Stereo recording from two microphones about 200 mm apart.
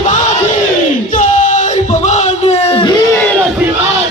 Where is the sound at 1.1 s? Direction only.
40° left (ahead or behind).